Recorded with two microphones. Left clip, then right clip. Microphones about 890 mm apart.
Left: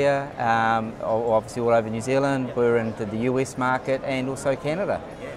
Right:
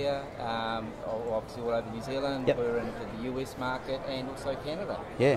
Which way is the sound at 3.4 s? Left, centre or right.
Left.